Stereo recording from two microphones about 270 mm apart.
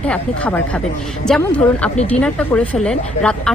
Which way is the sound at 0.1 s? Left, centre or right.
Centre.